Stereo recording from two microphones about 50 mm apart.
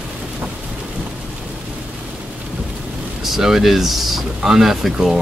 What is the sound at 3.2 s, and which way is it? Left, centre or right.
Speech, centre.